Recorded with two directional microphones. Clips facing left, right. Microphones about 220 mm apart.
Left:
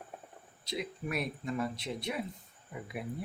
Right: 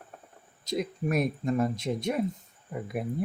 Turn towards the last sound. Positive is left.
turn(degrees=-45)  # may be behind; listen again after turning